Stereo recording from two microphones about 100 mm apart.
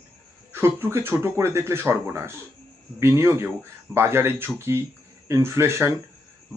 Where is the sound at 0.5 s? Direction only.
25° right (ahead or behind).